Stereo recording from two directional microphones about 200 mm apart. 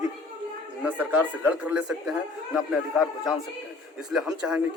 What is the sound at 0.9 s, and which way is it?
Speech, 10° right (ahead or behind).